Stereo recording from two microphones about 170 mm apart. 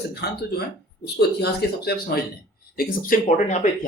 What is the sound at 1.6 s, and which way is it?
Speech, 70° left (ahead or behind).